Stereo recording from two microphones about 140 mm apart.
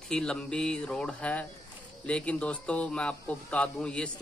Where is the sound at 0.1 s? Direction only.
5° left (ahead or behind).